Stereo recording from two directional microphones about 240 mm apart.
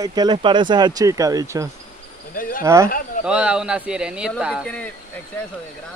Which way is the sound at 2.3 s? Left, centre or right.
Left.